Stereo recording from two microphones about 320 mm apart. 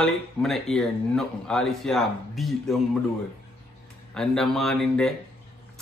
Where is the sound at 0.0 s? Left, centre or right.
Centre.